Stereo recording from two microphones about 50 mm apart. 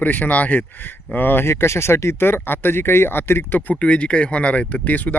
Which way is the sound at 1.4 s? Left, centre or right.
Left.